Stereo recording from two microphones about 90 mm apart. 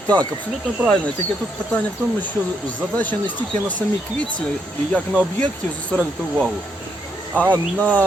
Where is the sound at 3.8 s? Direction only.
25° left (ahead or behind).